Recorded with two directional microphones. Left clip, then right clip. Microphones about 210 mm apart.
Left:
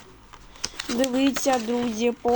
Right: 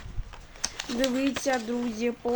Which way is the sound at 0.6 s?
10° left (ahead or behind).